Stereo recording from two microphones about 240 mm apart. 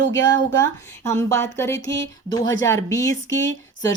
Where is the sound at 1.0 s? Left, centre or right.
Centre.